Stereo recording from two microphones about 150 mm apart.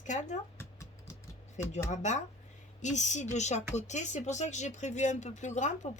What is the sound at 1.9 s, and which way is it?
Speech, 50° left (ahead or behind).